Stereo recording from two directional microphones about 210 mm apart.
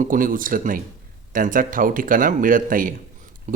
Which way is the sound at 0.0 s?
40° right (ahead or behind).